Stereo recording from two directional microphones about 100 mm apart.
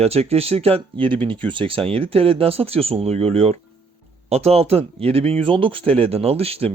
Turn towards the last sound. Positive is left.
turn(degrees=-80)